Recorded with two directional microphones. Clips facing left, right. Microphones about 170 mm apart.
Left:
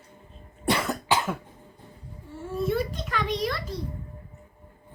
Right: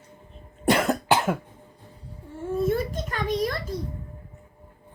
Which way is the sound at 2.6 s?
50° right (ahead or behind).